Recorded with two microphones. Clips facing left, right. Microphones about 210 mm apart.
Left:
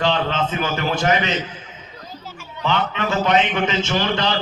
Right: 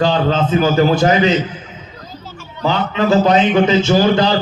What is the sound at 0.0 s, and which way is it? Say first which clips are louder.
A man's voice: right 6 dB; 35° right (ahead or behind).